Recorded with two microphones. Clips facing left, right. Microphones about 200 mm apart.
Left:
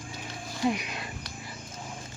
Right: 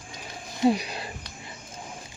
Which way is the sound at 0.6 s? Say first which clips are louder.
Right 6 dB; 35° right (ahead or behind).